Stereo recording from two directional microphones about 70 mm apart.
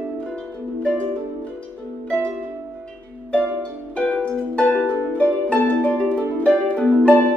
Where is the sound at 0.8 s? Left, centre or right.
Centre.